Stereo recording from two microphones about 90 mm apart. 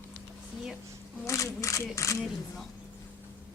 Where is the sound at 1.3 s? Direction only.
35° left (ahead or behind).